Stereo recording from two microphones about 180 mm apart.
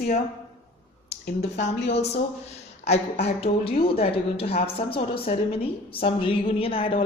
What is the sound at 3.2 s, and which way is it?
Speech, 30° left (ahead or behind).